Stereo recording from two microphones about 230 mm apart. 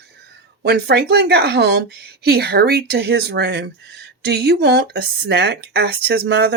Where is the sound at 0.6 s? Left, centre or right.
Right.